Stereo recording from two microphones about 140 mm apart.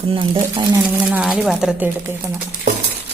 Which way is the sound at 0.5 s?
20° right (ahead or behind).